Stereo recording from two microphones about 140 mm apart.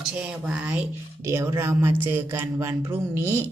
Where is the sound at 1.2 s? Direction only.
20° right (ahead or behind).